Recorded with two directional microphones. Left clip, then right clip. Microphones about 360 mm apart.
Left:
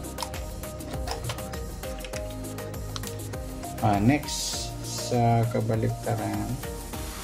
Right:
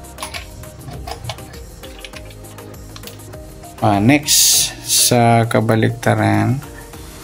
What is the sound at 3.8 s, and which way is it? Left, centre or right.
Speech, centre.